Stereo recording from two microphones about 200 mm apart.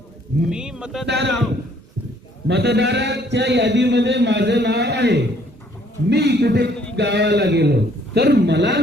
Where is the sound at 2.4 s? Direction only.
60° right (ahead or behind).